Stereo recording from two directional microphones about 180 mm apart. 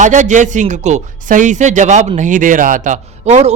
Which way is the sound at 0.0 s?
45° right (ahead or behind).